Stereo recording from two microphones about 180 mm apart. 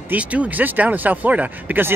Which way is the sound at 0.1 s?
10° right (ahead or behind).